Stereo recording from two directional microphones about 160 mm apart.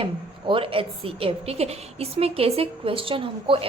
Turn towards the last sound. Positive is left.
turn(degrees=-35)  # may be behind; listen again after turning